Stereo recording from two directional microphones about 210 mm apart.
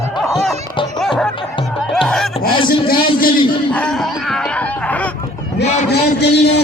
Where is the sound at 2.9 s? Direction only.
45° left (ahead or behind).